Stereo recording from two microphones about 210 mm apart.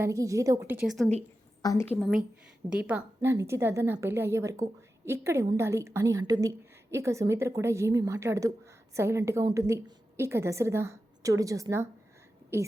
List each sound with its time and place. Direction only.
0.0 s a woman's voice: 15° right (ahead or behind)
1.6 s a woman's voice: 15° left (ahead or behind)
2.6 s a woman's voice: 5° right (ahead or behind)